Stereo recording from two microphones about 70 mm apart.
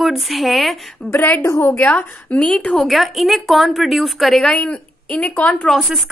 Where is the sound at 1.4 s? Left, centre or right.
Left.